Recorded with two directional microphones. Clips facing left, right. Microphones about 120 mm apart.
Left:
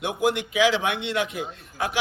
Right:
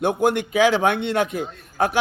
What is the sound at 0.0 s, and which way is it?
A man's voice, 50° right (ahead or behind).